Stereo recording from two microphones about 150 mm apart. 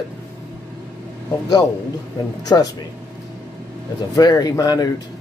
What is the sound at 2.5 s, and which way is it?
Speech, 25° left (ahead or behind).